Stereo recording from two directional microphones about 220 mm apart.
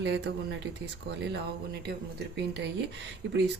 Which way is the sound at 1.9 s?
50° right (ahead or behind).